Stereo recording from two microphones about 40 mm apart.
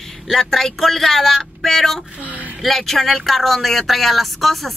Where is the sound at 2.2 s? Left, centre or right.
Right.